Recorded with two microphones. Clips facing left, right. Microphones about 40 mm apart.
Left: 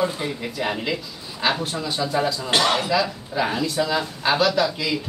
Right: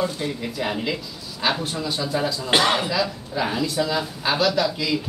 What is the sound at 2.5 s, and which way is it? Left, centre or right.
Speech, centre.